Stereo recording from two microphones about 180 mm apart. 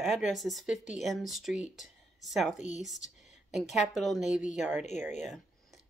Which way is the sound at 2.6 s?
40° left (ahead or behind).